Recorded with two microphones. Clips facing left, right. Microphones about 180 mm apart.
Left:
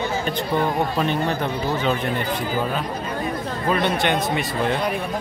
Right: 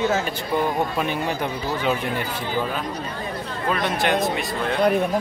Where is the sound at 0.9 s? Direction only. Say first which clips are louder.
Left 2 dB; 10° right (ahead or behind).